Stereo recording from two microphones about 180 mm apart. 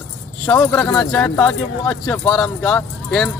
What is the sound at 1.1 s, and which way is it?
Speech, 5° left (ahead or behind).